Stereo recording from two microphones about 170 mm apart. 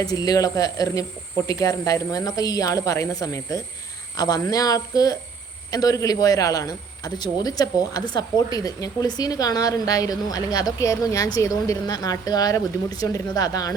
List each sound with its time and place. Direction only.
0.0 s a man's voice: 20° left (ahead or behind)